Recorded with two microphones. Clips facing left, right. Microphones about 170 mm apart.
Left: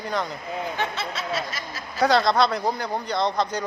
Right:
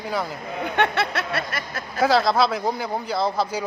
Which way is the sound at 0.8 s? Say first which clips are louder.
Right 6 dB; 65° right (ahead or behind).